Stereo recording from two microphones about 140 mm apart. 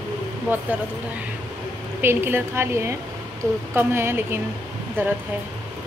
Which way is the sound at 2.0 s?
15° right (ahead or behind).